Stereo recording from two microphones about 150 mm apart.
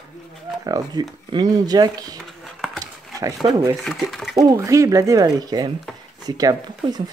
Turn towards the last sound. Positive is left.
turn(degrees=-25)  # may be behind; listen again after turning